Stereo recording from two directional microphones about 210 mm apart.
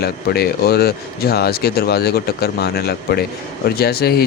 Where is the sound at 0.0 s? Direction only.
50° left (ahead or behind).